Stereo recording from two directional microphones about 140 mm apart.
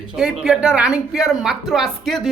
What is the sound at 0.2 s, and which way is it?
Speech, 5° right (ahead or behind).